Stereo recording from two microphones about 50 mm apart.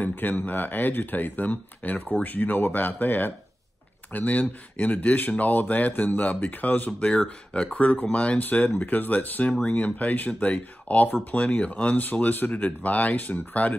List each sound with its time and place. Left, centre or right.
0.0 s speech: left
2.2 s speech: left
4.1 s speech: left
9.5 s speech: centre
9.8 s speech: left